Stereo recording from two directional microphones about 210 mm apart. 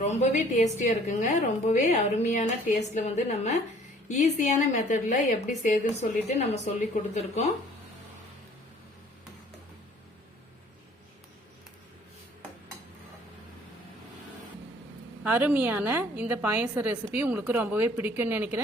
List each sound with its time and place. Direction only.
0.0 s a woman's voice: 35° left (ahead or behind)
15.2 s a woman's voice: 10° right (ahead or behind)